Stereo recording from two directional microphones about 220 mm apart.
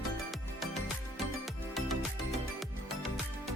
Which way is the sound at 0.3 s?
Centre (ahead or behind).